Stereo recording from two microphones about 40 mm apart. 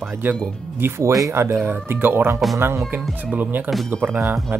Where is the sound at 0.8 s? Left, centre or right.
Right.